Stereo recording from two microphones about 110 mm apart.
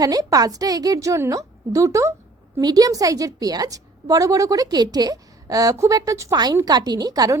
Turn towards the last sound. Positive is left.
turn(degrees=-35)  # may be behind; listen again after turning